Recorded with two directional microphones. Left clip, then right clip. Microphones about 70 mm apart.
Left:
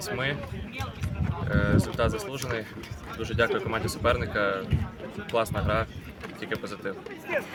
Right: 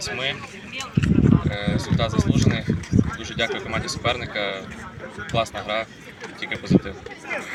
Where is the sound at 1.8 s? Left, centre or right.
Left.